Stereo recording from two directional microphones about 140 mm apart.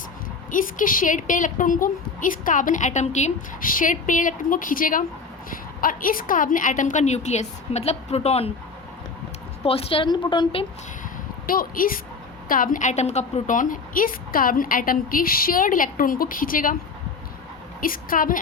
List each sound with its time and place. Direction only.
0.5 s a woman's voice: 70° left (ahead or behind); by 8.5 s 45° left (ahead or behind)
9.6 s a woman's voice: 45° left (ahead or behind)
11.4 s a woman's voice: 90° left
17.7 s a woman's voice: 90° left